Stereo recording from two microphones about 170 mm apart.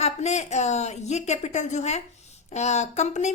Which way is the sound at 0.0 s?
40° left (ahead or behind).